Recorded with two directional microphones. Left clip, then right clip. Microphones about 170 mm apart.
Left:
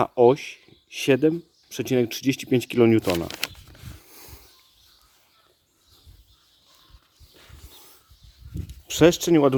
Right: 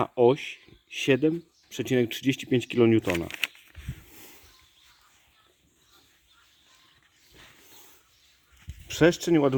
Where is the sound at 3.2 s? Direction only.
60° left (ahead or behind).